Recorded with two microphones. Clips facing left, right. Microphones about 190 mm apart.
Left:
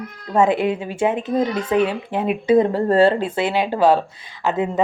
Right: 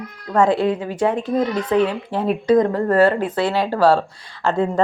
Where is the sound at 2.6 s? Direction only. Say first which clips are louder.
Even; 25° left (ahead or behind).